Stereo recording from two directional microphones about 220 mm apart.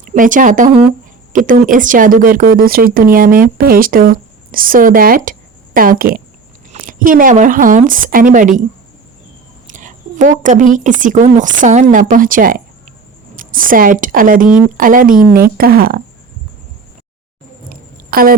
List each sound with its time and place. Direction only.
0.0 s speech: 35° right (ahead or behind)
9.6 s speech: 35° right (ahead or behind)
17.7 s a sound: 40° right (ahead or behind)